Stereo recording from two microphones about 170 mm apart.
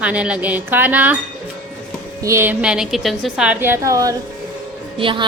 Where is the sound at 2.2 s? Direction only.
15° right (ahead or behind).